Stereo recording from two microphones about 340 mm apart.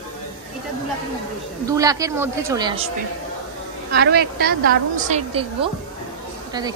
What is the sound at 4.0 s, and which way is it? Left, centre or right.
A woman's voice, right.